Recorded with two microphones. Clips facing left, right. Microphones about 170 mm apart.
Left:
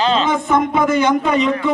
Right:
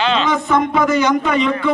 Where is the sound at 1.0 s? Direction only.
25° left (ahead or behind).